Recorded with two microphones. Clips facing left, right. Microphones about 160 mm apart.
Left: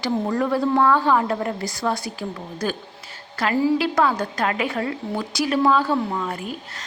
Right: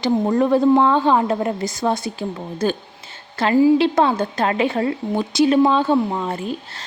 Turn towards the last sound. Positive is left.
turn(degrees=-25)  # may be behind; listen again after turning